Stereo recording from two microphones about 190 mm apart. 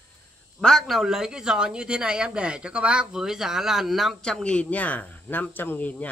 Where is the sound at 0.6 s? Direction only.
Centre (ahead or behind).